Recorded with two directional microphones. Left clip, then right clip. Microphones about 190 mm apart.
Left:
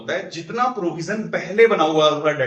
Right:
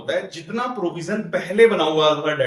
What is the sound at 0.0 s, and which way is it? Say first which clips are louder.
A man's voice: right 1 dB; 10° left (ahead or behind).